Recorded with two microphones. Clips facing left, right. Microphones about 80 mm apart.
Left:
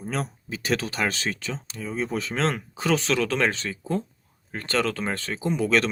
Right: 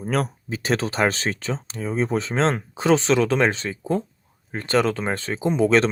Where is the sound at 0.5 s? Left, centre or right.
Right.